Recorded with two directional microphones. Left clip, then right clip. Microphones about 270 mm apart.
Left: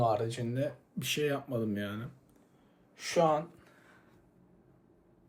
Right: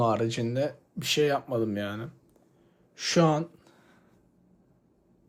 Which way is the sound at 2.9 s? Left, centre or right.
Right.